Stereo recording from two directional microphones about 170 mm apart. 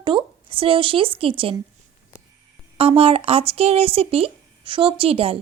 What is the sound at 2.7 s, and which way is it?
Speech, 35° right (ahead or behind).